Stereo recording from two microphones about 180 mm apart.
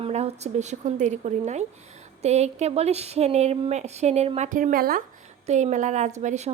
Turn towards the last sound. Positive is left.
turn(degrees=-40)  # may be behind; listen again after turning